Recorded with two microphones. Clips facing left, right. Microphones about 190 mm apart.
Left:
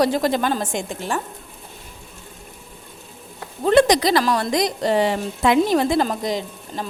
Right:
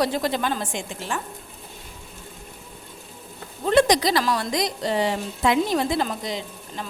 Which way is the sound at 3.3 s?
65° left (ahead or behind).